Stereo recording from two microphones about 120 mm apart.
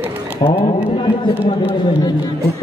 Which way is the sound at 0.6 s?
40° left (ahead or behind).